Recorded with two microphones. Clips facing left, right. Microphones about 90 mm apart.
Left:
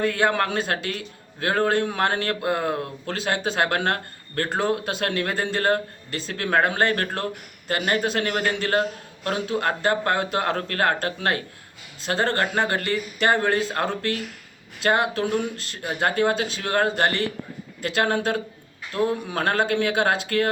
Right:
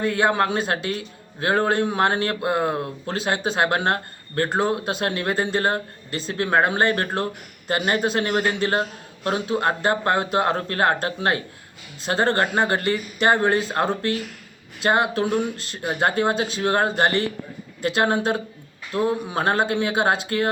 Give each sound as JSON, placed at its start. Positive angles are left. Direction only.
{"t": 0.0, "sound": "a man's voice", "side_deg": -20}